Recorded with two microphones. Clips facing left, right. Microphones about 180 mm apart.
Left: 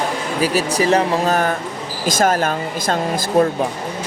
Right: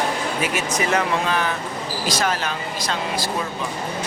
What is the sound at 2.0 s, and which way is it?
Speech, 50° left (ahead or behind).